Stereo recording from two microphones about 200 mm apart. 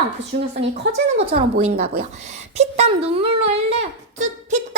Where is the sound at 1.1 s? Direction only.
30° right (ahead or behind).